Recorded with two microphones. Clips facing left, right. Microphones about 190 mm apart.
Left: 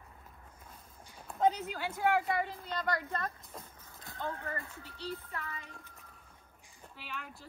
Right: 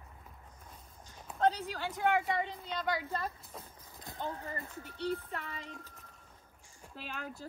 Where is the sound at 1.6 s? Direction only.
5° left (ahead or behind); by 4.7 s 15° right (ahead or behind).